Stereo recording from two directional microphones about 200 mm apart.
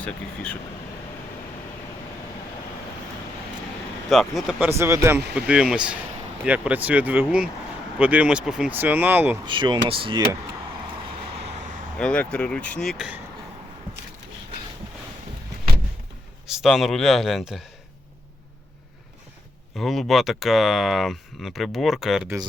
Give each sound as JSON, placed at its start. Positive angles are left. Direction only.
{"t": 0.0, "sound": "speech", "side_deg": 5}
{"t": 4.1, "sound": "speech", "side_deg": 0}
{"t": 4.8, "sound": "speech", "side_deg": -15}
{"t": 9.5, "sound": "speech", "side_deg": -25}
{"t": 11.9, "sound": "speech", "side_deg": 5}
{"t": 16.6, "sound": "speech", "side_deg": 0}
{"t": 19.7, "sound": "speech", "side_deg": 0}